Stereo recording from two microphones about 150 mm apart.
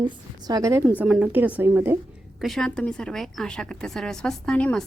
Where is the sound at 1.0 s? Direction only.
5° right (ahead or behind).